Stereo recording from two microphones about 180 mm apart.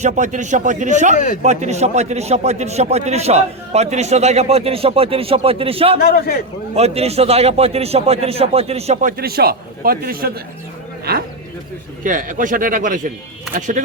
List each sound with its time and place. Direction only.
0.0 s speech: 45° right (ahead or behind)
1.1 s speech: 45° left (ahead or behind)
1.4 s a man's voice: 40° right (ahead or behind)
6.1 s a man's voice: 60° left (ahead or behind)
6.7 s a man's voice: 35° right (ahead or behind)